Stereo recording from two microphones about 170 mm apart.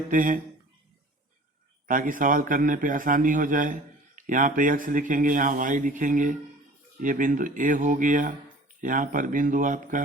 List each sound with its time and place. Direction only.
0.1 s a man's voice: 55° right (ahead or behind)
1.9 s a man's voice: 50° right (ahead or behind)